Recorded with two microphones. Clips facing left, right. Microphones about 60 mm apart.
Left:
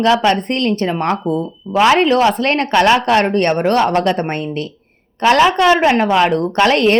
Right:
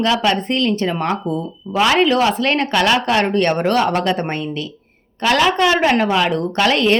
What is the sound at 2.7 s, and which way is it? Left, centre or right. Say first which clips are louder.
A woman's voice: left 6 dB; left.